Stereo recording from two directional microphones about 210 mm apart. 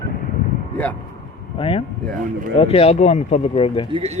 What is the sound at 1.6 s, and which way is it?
Speech, 30° left (ahead or behind).